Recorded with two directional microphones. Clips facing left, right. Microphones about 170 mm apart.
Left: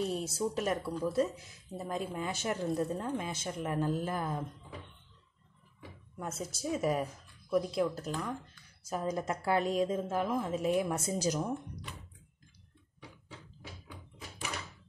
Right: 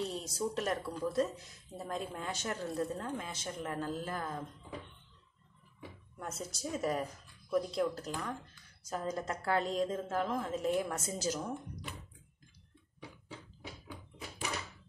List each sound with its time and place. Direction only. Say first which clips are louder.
0.0 s a woman's voice: left 3 dB; 10° left (ahead or behind)
6.1 s a woman's voice: left 3 dB; 5° left (ahead or behind)
10.9 s a woman's voice: left 4 dB; 15° left (ahead or behind)